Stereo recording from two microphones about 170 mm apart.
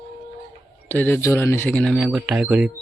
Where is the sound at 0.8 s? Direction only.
10° left (ahead or behind).